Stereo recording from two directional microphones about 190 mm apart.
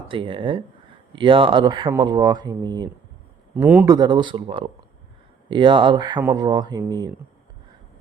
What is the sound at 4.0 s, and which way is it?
Speech, 20° right (ahead or behind).